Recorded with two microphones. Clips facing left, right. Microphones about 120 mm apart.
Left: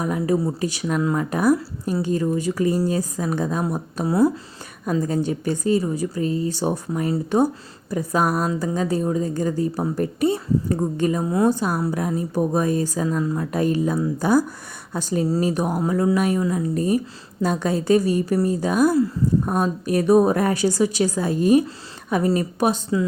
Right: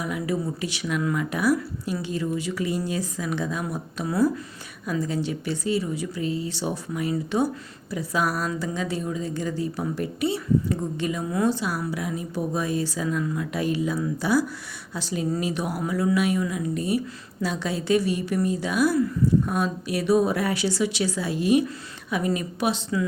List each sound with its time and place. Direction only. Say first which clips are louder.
0.0 s speech: left 6 dB; 40° left (ahead or behind)
4.0 s speech: left 4 dB; 25° left (ahead or behind)
4.9 s speech: left 5 dB; 45° left (ahead or behind)
11.4 s speech: left 4 dB; 45° left (ahead or behind)
18.9 s speech: left 2 dB; 30° left (ahead or behind)
19.5 s speech: left 5 dB; 45° left (ahead or behind)